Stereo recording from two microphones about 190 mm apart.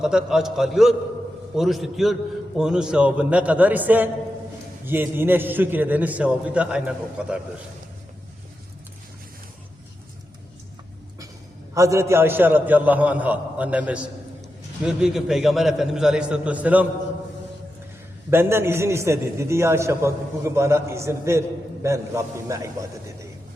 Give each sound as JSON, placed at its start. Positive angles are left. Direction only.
{"t": 0.0, "sound": "a man's voice", "side_deg": -5}
{"t": 11.7, "sound": "a man's voice", "side_deg": -15}
{"t": 18.3, "sound": "a man's voice", "side_deg": -10}